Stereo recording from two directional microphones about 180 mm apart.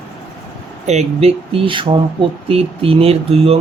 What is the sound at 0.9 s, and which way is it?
Speech, 35° right (ahead or behind).